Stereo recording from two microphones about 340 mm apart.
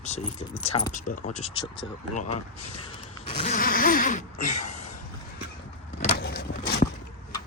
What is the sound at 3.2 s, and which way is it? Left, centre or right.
Gasp, centre.